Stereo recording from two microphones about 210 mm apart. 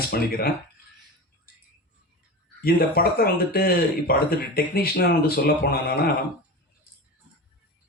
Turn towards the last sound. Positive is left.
turn(degrees=45)  # may be behind; listen again after turning